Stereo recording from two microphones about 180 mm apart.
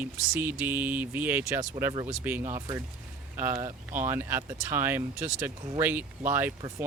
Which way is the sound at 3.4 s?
15° right (ahead or behind).